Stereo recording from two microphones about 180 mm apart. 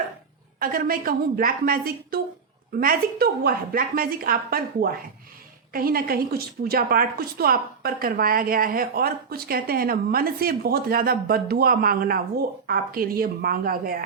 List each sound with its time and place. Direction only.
0.6 s a woman's voice: 55° right (ahead or behind)